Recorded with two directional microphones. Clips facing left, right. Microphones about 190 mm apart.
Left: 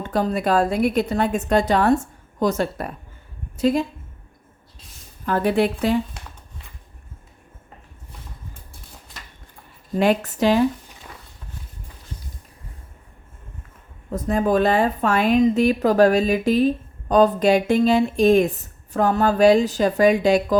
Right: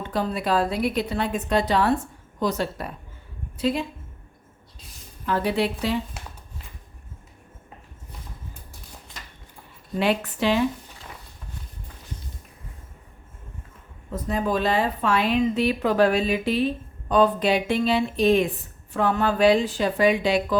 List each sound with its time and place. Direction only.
0.0 s a woman's voice: 45° left (ahead or behind)
5.2 s a woman's voice: 50° left (ahead or behind)
9.9 s a woman's voice: 45° left (ahead or behind)
14.1 s a woman's voice: 50° left (ahead or behind)